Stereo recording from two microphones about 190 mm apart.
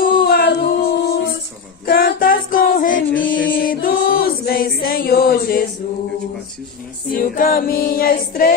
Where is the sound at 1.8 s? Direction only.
50° left (ahead or behind).